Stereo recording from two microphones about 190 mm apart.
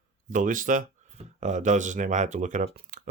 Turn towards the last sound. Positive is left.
turn(degrees=-45)  # may be behind; listen again after turning